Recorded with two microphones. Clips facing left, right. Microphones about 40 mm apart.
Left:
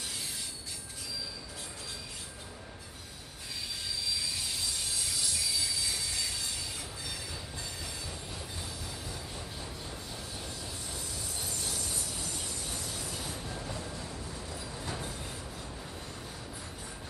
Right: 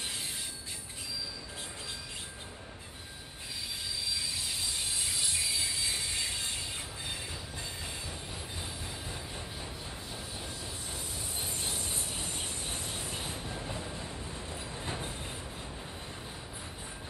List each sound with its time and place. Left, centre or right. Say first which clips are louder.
4.9 s train: right 1 dB; right
11.4 s train: right 1 dB; right
13.4 s train: even; centre